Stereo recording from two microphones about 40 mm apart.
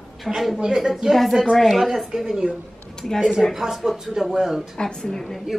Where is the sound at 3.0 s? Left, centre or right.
Centre.